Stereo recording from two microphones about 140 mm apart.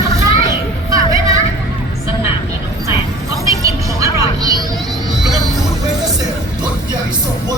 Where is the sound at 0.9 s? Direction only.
25° right (ahead or behind).